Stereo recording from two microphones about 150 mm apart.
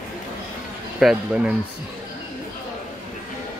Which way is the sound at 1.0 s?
5° right (ahead or behind).